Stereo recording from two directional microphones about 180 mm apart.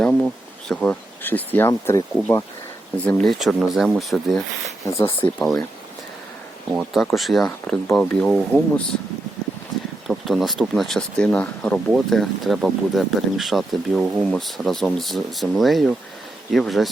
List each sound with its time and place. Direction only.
0.0 s bee: 5° left (ahead or behind)
0.7 s speech: 5° left (ahead or behind)
4.8 s speech: 15° left (ahead or behind)
5.2 s speech: 5° left (ahead or behind)
6.7 s speech: centre (ahead or behind)
10.1 s speech: centre (ahead or behind)